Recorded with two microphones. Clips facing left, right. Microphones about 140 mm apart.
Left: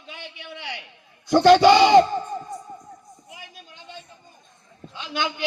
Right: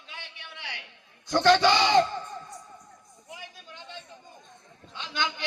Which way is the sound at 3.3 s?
15° left (ahead or behind).